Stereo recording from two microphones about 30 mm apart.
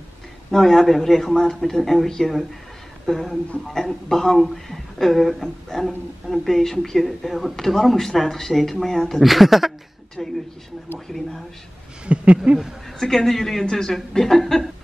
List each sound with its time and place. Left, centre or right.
0.5 s a woman's voice: centre
9.2 s speech: centre
10.2 s a woman's voice: centre
12.1 s a sound: right
12.5 s speech: right
13.0 s a woman's voice: centre